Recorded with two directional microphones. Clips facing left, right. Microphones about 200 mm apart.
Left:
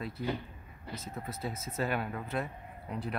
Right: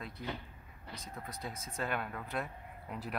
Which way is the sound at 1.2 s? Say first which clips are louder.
Left 5 dB; 5° left (ahead or behind).